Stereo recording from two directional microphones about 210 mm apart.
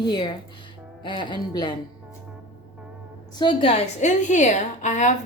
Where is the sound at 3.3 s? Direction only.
25° left (ahead or behind).